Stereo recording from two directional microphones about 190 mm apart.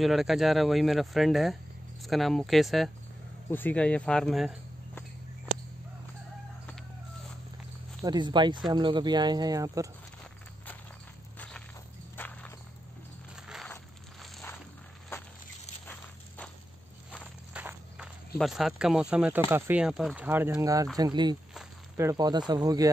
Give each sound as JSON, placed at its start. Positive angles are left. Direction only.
{"t": 0.0, "sound": "speech", "side_deg": 0}
{"t": 8.0, "sound": "speech", "side_deg": -20}
{"t": 11.3, "sound": "crushing", "side_deg": 5}
{"t": 12.2, "sound": "walk", "side_deg": 10}
{"t": 17.6, "sound": "walk", "side_deg": -5}
{"t": 18.4, "sound": "speech", "side_deg": 0}